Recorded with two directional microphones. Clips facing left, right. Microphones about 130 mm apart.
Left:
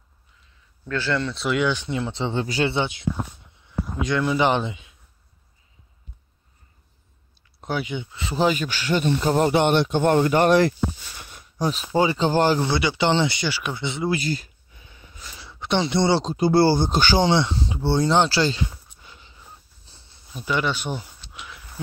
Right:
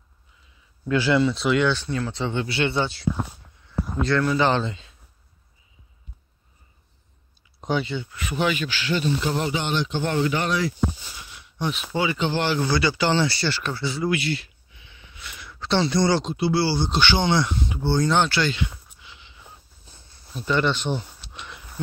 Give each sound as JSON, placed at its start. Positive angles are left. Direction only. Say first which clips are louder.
{"t": 0.8, "sound": "speech", "louder": "right 5 dB", "side_deg": -15}
{"t": 1.7, "sound": "speech", "louder": "even", "side_deg": 15}
{"t": 2.4, "sound": "speech", "louder": "left 2 dB", "side_deg": 40}
{"t": 2.7, "sound": "a man's voice", "louder": "even", "side_deg": 20}
{"t": 7.6, "sound": "speech", "louder": "right 2 dB", "side_deg": 5}
{"t": 7.9, "sound": "speech", "louder": "even", "side_deg": 20}
{"t": 9.5, "sound": "speech", "louder": "left 7 dB", "side_deg": 60}
{"t": 11.1, "sound": "a sound", "louder": "left 3 dB", "side_deg": 45}
{"t": 11.9, "sound": "speech", "louder": "left 5 dB", "side_deg": 35}
{"t": 12.6, "sound": "speech", "louder": "left 1 dB", "side_deg": 25}
{"t": 14.1, "sound": "a sound", "louder": "even", "side_deg": 40}
{"t": 15.6, "sound": "speech", "louder": "even", "side_deg": 15}
{"t": 20.2, "sound": "speech", "louder": "right 2 dB", "side_deg": 5}
{"t": 21.3, "sound": "a sound", "louder": "right 1 dB", "side_deg": 5}